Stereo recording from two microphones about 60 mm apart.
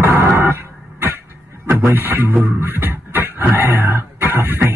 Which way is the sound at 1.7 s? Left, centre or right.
Right.